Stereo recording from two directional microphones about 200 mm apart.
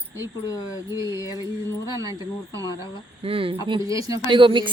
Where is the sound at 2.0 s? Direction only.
15° right (ahead or behind).